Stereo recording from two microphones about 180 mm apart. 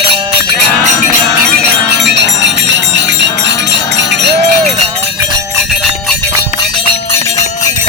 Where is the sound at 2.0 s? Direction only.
70° right (ahead or behind).